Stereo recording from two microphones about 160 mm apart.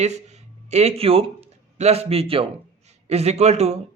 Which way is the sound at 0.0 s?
45° right (ahead or behind).